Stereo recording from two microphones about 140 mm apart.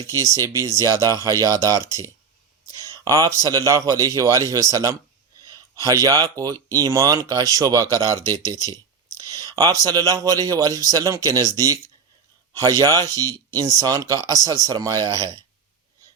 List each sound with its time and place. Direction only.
0.3 s speech: 20° right (ahead or behind)
9.1 s speech: 25° right (ahead or behind)